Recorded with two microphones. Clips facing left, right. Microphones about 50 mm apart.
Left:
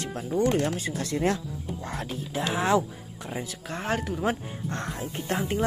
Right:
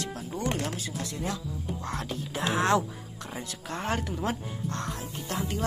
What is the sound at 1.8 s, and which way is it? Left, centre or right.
Speech, centre.